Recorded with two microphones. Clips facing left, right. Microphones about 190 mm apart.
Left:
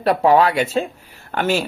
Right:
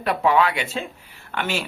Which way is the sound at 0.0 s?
35° left (ahead or behind).